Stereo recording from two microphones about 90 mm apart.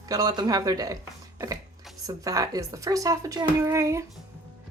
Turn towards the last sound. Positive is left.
turn(degrees=-35)  # may be behind; listen again after turning